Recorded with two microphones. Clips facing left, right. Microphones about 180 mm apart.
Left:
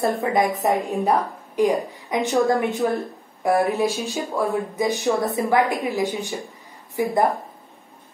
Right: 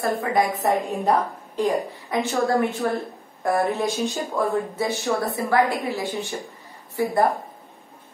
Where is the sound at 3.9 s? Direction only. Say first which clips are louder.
Right 1 dB; centre (ahead or behind).